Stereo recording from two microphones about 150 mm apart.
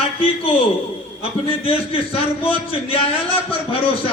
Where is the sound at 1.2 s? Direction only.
40° left (ahead or behind).